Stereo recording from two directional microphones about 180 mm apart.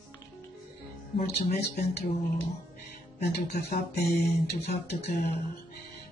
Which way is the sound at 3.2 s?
65° left (ahead or behind).